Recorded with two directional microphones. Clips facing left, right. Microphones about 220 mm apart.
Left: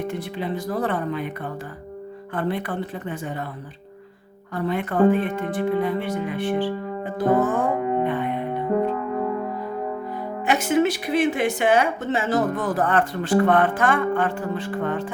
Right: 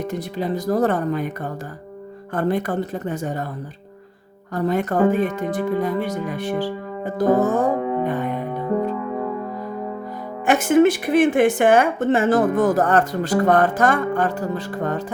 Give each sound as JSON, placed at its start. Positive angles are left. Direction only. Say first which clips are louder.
{"t": 0.0, "sound": "speech", "louder": "right 2 dB", "side_deg": -40}
{"t": 2.3, "sound": "a woman's voice", "louder": "right 5 dB", "side_deg": -45}
{"t": 4.5, "sound": "speech", "louder": "right 3 dB", "side_deg": -40}
{"t": 10.4, "sound": "a woman's voice", "louder": "right 5 dB", "side_deg": -50}